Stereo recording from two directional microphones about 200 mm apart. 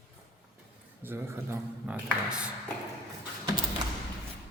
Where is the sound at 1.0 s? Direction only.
10° right (ahead or behind).